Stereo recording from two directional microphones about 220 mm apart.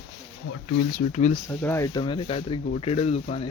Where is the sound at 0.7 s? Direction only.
45° left (ahead or behind).